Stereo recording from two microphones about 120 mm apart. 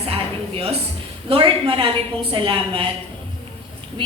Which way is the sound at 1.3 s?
50° right (ahead or behind).